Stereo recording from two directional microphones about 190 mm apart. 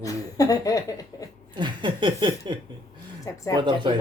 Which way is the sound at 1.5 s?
25° right (ahead or behind).